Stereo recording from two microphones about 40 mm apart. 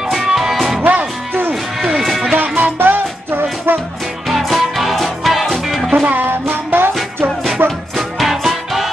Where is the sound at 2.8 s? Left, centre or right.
Right.